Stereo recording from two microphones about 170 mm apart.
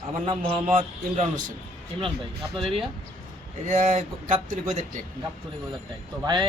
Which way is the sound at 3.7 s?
45° right (ahead or behind).